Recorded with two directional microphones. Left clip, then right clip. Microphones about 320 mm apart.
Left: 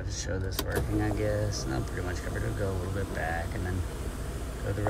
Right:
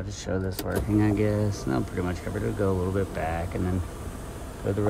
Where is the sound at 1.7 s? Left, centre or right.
Right.